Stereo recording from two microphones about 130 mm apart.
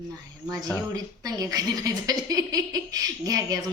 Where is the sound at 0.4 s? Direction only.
30° right (ahead or behind).